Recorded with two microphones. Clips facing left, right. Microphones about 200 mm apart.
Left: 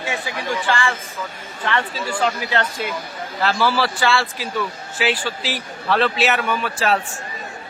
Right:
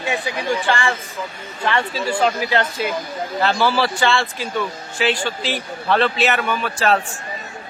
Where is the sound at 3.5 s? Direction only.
Centre (ahead or behind).